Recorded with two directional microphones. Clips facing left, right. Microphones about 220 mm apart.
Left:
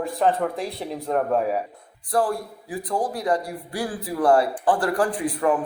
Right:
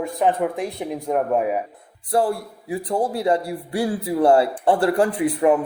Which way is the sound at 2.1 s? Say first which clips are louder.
Right 2 dB; 25° right (ahead or behind).